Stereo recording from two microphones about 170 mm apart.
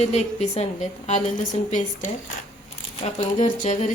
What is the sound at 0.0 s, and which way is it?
A woman's voice, 40° left (ahead or behind).